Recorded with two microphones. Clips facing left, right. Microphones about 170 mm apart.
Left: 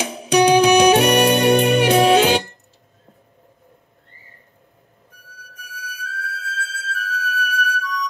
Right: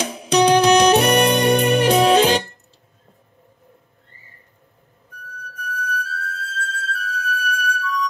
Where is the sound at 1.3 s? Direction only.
60° left (ahead or behind).